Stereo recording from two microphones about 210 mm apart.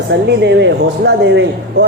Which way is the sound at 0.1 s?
55° right (ahead or behind).